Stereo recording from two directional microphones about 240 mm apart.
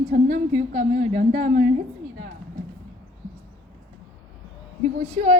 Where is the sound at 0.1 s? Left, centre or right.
Right.